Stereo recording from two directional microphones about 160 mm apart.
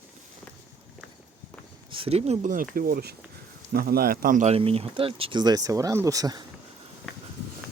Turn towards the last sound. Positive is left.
turn(degrees=0)  # may be behind; listen again after turning